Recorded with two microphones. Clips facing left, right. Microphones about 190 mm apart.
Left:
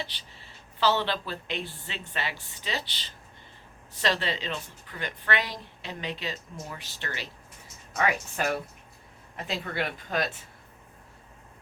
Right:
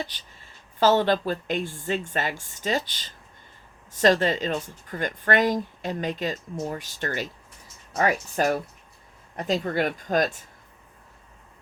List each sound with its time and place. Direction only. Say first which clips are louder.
0.1 s a woman's voice: left 1 dB; 45° right (ahead or behind)